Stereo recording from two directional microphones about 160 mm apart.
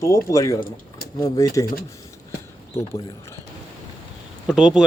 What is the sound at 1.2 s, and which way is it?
Speech, 20° left (ahead or behind).